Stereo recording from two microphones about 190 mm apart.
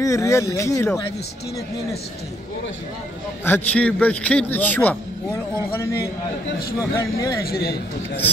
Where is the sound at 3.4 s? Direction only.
10° left (ahead or behind).